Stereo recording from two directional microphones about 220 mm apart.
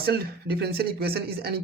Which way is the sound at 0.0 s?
45° right (ahead or behind).